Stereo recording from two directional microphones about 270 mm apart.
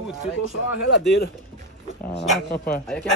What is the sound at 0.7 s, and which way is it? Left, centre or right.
Speech, left.